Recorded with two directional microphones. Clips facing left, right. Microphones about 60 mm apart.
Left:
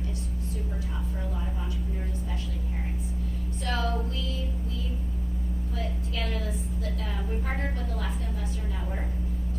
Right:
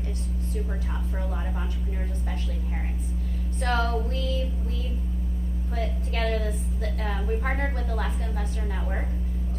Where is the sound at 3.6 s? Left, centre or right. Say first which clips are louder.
Right 4 dB; right.